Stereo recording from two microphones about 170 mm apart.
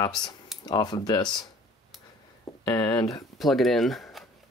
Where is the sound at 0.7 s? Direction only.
25° left (ahead or behind).